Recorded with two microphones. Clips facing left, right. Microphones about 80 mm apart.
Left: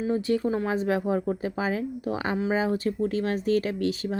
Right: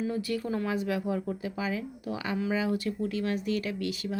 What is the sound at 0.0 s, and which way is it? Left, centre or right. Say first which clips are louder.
Speech: left 6 dB; left.